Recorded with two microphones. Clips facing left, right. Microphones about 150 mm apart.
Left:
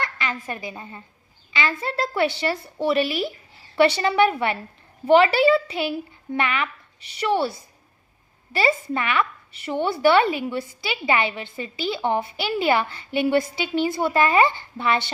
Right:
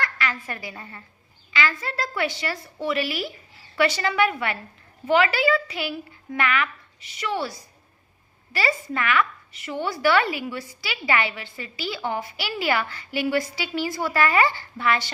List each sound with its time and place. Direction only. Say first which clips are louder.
0.0 s a woman's voice: even; 25° left (ahead or behind)